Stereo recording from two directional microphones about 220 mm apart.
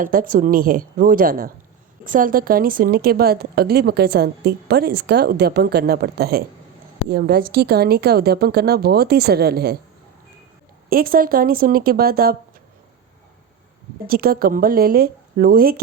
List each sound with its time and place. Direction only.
0.0 s a woman's voice: 40° right (ahead or behind)
10.8 s a woman's voice: 40° right (ahead or behind)
14.1 s speech: 40° right (ahead or behind)